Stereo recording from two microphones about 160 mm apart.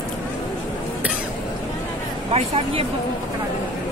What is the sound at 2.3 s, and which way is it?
Speech, 35° right (ahead or behind).